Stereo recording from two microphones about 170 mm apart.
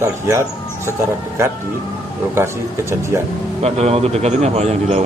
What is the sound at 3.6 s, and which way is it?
A man's voice, 40° right (ahead or behind).